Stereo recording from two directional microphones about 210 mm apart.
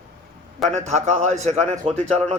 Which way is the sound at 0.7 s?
35° right (ahead or behind).